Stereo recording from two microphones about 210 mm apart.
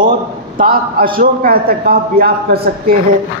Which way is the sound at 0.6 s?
45° right (ahead or behind).